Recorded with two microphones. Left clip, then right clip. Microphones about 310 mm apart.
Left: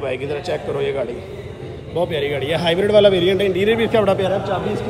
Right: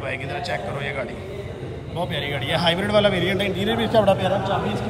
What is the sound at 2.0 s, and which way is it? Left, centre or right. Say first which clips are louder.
A man's voice: left 3 dB; centre.